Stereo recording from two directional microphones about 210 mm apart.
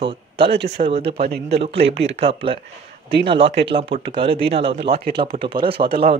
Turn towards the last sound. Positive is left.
turn(degrees=-25)  # may be behind; listen again after turning